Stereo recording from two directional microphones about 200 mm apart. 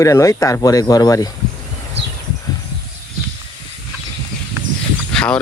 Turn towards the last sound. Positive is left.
turn(degrees=5)  # may be behind; listen again after turning